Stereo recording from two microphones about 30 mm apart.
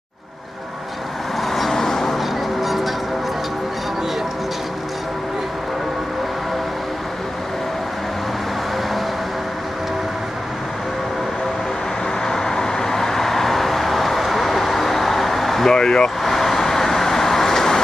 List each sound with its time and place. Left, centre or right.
1.5 s vehicle: centre
1.8 s a sound: centre
2.1 s music: centre
12.3 s vehicle: centre
15.7 s vehicle: left
16.2 s vehicle: centre